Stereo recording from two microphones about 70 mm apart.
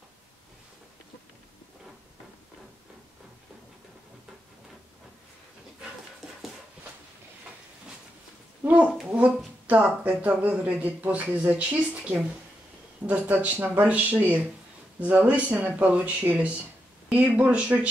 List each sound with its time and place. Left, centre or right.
6.2 s dog: centre
8.6 s a child's voice: right